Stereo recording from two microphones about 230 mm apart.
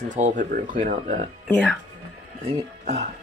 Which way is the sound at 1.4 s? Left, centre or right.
Centre.